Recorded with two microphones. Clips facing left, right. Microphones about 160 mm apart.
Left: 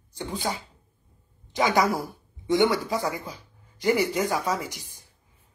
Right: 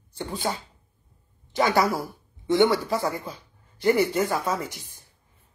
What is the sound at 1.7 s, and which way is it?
Speech, 20° left (ahead or behind).